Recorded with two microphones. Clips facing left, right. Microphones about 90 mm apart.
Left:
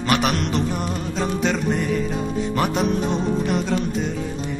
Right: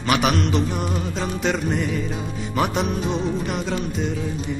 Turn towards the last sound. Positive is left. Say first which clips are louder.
# left 2 dB
turn(degrees=0)  # may be behind; listen again after turning